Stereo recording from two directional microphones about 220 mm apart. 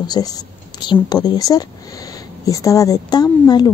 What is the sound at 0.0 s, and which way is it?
A woman's voice, 15° left (ahead or behind).